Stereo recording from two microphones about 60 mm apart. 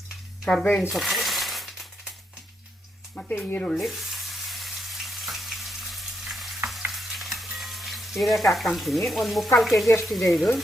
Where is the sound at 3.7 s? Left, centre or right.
Centre.